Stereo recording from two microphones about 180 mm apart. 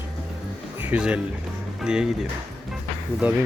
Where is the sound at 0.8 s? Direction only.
5° right (ahead or behind).